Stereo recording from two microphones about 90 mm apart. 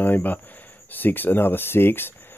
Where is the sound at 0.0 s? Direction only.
20° left (ahead or behind).